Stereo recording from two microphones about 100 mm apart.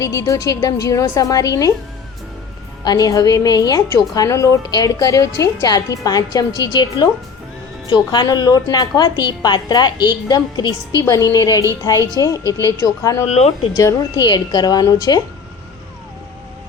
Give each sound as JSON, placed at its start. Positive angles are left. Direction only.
{"t": 0.0, "sound": "a woman's voice", "side_deg": 35}
{"t": 2.8, "sound": "a woman's voice", "side_deg": 40}
{"t": 8.1, "sound": "a woman's voice", "side_deg": 45}
{"t": 11.0, "sound": "a woman's voice", "side_deg": 35}
{"t": 12.4, "sound": "a woman's voice", "side_deg": -35}
{"t": 12.6, "sound": "a woman's voice", "side_deg": 35}
{"t": 13.2, "sound": "speech", "side_deg": 90}
{"t": 13.7, "sound": "a woman's voice", "side_deg": 40}